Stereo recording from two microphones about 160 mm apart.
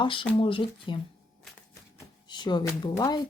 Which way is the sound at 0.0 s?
30° left (ahead or behind).